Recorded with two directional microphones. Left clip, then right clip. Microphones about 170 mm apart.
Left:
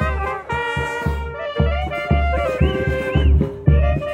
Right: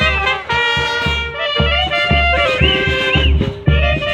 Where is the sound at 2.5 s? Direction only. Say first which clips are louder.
Right 8 dB; 35° left (ahead or behind).